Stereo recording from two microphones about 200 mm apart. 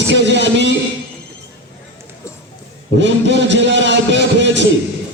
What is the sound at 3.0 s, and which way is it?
A man's voice, 65° right (ahead or behind).